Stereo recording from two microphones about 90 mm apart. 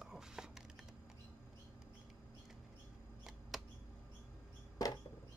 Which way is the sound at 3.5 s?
5° right (ahead or behind).